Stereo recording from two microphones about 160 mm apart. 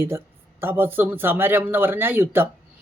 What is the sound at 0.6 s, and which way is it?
Speech, 15° right (ahead or behind).